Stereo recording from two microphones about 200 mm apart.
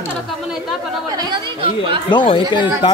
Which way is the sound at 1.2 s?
25° right (ahead or behind).